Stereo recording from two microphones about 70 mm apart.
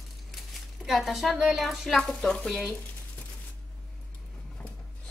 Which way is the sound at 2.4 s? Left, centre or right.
Centre.